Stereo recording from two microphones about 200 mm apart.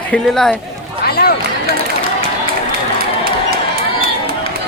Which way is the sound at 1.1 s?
50° left (ahead or behind).